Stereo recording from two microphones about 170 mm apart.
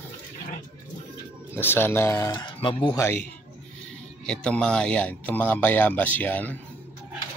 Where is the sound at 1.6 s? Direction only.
10° left (ahead or behind); by 3.0 s 30° left (ahead or behind).